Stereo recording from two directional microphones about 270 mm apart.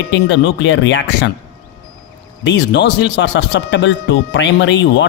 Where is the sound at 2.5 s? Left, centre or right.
Left.